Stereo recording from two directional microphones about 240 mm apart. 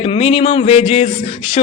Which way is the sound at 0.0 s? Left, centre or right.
Left.